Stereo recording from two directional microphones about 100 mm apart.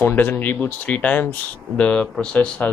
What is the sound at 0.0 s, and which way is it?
Speech, 20° left (ahead or behind).